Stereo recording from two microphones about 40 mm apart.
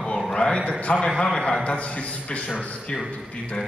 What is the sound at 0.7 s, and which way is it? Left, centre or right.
Speech, left.